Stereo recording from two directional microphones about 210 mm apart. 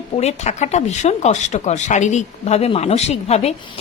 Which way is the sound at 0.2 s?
30° left (ahead or behind).